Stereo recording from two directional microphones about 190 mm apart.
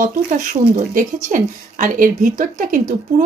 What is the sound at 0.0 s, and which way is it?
Speech, 45° right (ahead or behind).